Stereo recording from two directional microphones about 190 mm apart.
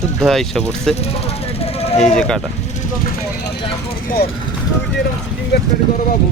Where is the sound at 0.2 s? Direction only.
Centre (ahead or behind).